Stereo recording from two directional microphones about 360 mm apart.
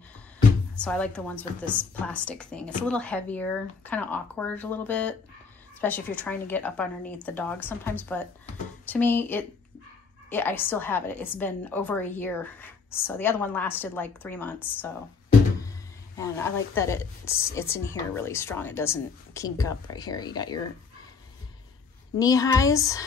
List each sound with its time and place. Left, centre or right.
0.8 s a woman's voice: centre
22.2 s a woman's voice: centre